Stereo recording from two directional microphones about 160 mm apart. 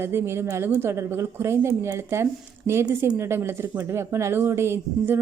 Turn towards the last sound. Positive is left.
turn(degrees=-15)  # may be behind; listen again after turning